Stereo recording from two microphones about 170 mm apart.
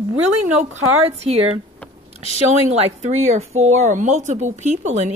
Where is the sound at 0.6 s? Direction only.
40° right (ahead or behind).